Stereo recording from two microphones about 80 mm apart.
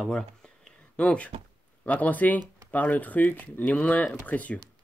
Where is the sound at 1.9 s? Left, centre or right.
Centre.